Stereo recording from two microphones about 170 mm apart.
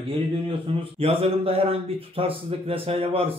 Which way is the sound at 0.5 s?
30° right (ahead or behind).